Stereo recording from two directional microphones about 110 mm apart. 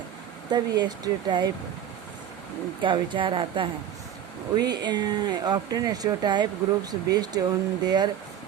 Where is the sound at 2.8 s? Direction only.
50° right (ahead or behind).